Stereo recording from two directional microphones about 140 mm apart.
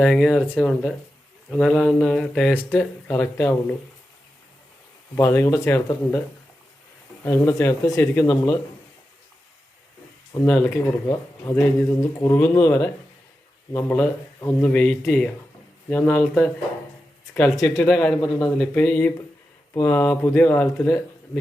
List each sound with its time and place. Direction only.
0.0 s speech: centre (ahead or behind)
5.1 s speech: 15° left (ahead or behind)
7.3 s speech: 20° left (ahead or behind)
10.3 s speech: 15° left (ahead or behind)
17.8 s speech: 5° left (ahead or behind)
18.2 s speech: 25° left (ahead or behind)
18.7 s speech: 15° left (ahead or behind)